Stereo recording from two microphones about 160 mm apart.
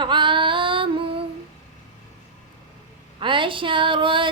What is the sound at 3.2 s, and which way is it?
Speech, 30° right (ahead or behind).